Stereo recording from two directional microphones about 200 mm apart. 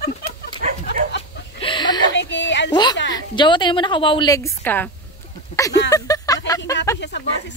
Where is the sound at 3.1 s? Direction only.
25° left (ahead or behind).